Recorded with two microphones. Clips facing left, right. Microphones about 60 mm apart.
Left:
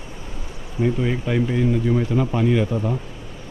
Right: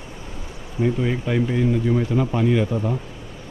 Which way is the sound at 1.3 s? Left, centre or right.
Centre.